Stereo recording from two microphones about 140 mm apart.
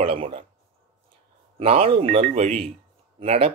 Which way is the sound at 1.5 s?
45° right (ahead or behind).